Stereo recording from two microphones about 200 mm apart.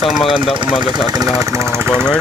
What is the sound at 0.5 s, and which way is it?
Speech, 25° right (ahead or behind).